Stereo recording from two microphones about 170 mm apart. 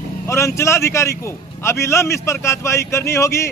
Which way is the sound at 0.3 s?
15° left (ahead or behind).